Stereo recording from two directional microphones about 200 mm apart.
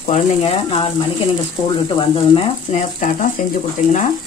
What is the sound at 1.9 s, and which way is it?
Speech, 25° left (ahead or behind).